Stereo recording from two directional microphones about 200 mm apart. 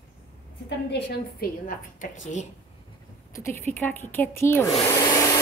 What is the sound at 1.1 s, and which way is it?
A woman's voice, 45° left (ahead or behind).